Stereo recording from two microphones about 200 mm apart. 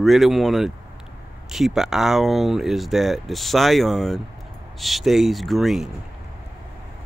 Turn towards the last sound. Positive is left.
turn(degrees=0)  # may be behind; listen again after turning